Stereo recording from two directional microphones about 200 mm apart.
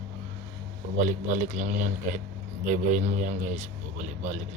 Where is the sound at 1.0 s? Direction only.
40° right (ahead or behind).